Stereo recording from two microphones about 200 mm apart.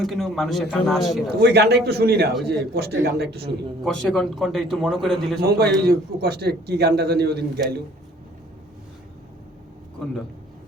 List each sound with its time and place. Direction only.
0.0 s a man's voice: centre (ahead or behind)
1.3 s a man's voice: 55° right (ahead or behind)
3.8 s a man's voice: 5° left (ahead or behind)
5.4 s a man's voice: 55° right (ahead or behind)